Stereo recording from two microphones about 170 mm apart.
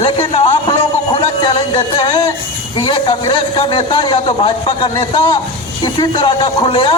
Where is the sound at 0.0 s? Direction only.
30° left (ahead or behind).